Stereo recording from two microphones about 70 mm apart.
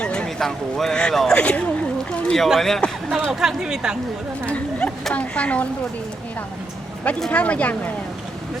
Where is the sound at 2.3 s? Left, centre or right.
Centre.